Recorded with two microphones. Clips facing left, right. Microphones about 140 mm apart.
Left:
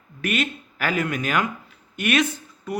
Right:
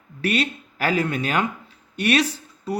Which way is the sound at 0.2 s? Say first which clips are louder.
Right 2 dB; 35° right (ahead or behind).